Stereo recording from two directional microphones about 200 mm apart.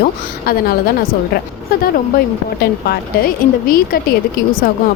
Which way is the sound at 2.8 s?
45° left (ahead or behind).